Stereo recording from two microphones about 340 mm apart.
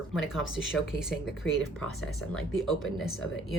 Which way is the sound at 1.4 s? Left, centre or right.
Centre.